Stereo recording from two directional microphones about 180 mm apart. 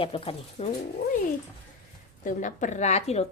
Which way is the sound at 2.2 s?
45° left (ahead or behind).